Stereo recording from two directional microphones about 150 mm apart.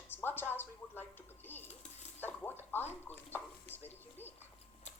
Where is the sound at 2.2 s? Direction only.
15° left (ahead or behind).